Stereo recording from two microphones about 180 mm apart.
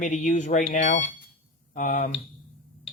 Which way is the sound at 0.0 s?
45° left (ahead or behind).